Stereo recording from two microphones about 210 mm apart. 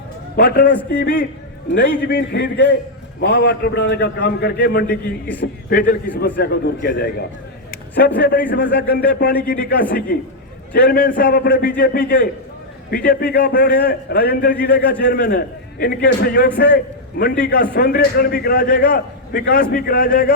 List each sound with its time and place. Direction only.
0.3 s a man's voice: 45° left (ahead or behind)